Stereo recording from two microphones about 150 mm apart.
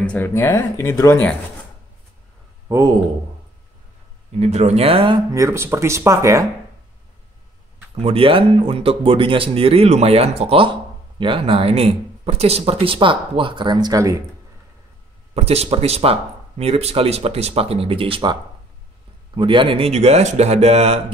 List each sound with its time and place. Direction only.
0.0 s speech: 10° left (ahead or behind)
2.7 s speech: 25° right (ahead or behind)
4.4 s speech: 45° right (ahead or behind)
5.3 s speech: 20° right (ahead or behind)
8.0 s speech: 40° right (ahead or behind)
15.3 s speech: 45° right (ahead or behind)